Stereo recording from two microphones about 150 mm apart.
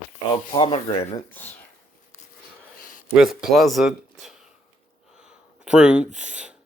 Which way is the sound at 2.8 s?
65° left (ahead or behind).